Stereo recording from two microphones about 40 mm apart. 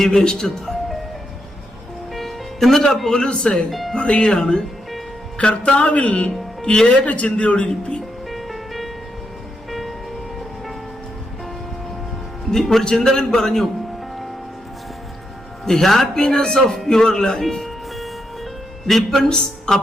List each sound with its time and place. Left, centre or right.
0.0 s speech: centre
2.1 s a man's voice: centre; by 3.6 s left
3.7 s speech: centre
3.9 s speech: left
6.1 s speech: left
8.3 s music: centre
12.5 s a man's voice: centre
15.6 s speech: centre
16.2 s speech: centre
17.4 s music: centre
18.9 s speech: centre